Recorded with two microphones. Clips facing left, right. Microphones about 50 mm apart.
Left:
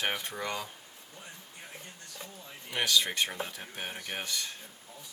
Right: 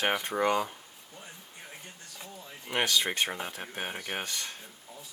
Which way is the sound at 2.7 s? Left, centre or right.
Right.